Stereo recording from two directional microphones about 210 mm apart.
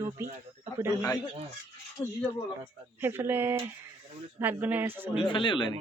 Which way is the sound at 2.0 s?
15° left (ahead or behind).